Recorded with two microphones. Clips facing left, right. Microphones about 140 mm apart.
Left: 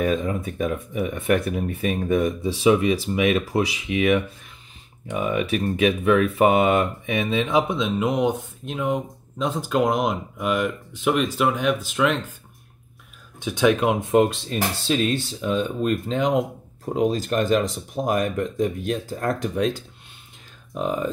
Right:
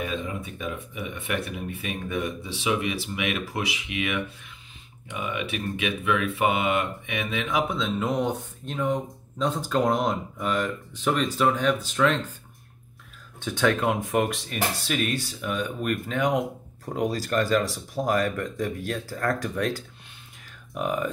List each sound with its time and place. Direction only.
0.0 s speech: 45° left (ahead or behind); by 12.2 s 10° left (ahead or behind)
13.4 s speech: 15° left (ahead or behind)